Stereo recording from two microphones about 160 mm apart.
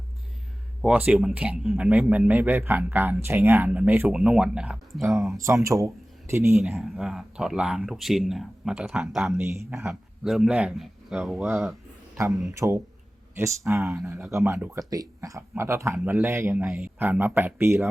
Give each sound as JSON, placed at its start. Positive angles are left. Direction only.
{"t": 0.8, "sound": "speech", "side_deg": -5}
{"t": 5.3, "sound": "speech", "side_deg": -20}
{"t": 6.7, "sound": "speech", "side_deg": 0}
{"t": 9.3, "sound": "speech", "side_deg": -15}
{"t": 9.9, "sound": "speech", "side_deg": 0}
{"t": 12.5, "sound": "speech", "side_deg": -20}